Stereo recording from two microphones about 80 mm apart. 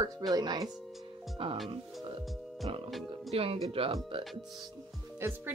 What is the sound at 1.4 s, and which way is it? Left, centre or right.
Speech, right.